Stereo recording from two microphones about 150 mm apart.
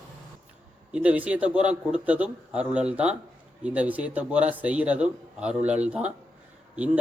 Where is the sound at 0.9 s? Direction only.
10° right (ahead or behind).